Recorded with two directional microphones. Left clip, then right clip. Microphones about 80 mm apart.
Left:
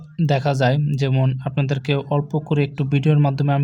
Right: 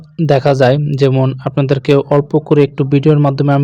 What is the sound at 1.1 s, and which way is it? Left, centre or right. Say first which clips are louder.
Speech: right 9 dB; right.